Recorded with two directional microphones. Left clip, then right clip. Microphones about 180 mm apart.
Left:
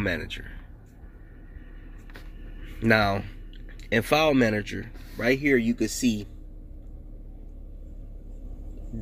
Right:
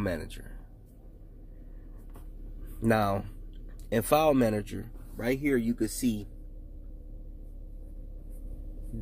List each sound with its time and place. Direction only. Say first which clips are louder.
0.0 s speech: left 5 dB; 10° right (ahead or behind)
2.8 s speech: left 5 dB; 5° right (ahead or behind)
5.7 s speech: left 4 dB; 20° left (ahead or behind)